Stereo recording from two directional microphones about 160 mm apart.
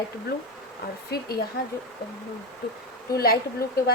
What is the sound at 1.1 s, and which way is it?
Speech, 75° left (ahead or behind).